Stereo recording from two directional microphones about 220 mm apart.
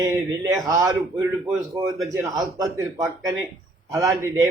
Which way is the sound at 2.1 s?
15° right (ahead or behind).